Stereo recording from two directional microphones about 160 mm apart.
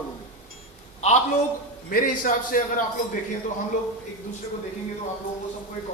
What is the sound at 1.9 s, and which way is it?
Speech, 60° left (ahead or behind).